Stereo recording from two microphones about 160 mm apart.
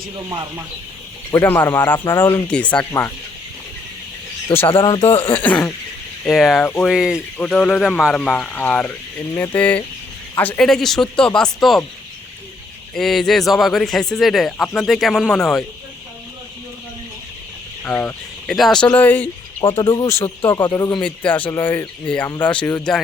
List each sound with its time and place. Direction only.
0.2 s speech: 20° right (ahead or behind)
1.3 s speech: 15° left (ahead or behind)
4.7 s speech: 30° left (ahead or behind)
5.4 s speech: 10° left (ahead or behind)
6.9 s speech: 5° right (ahead or behind)
7.3 s speech: 5° left (ahead or behind)
12.9 s speech: centre (ahead or behind)
17.8 s speech: 10° left (ahead or behind)
19.6 s speech: 30° left (ahead or behind)
21.0 s speech: 10° left (ahead or behind)